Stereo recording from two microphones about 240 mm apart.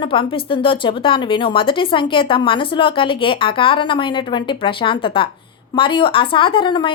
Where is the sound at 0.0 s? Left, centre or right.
Left.